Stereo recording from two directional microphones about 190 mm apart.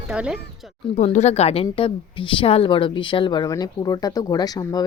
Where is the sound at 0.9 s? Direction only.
35° left (ahead or behind).